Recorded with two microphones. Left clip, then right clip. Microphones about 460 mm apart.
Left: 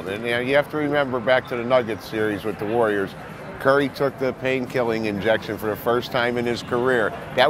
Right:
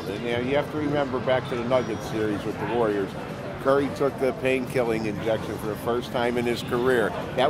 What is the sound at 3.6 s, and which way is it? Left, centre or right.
Speech, left.